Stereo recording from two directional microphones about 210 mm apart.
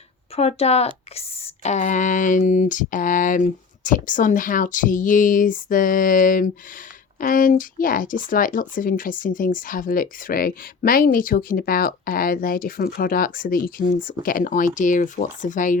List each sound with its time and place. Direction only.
0.3 s speech: 30° left (ahead or behind)